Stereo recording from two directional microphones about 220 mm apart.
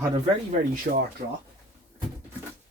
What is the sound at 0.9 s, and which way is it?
Speech, 45° right (ahead or behind).